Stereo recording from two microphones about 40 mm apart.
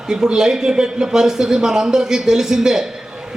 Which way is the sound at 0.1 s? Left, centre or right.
Centre.